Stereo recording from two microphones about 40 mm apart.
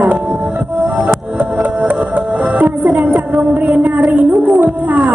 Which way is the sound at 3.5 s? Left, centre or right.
Right.